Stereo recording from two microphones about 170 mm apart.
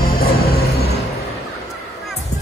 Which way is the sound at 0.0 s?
65° left (ahead or behind).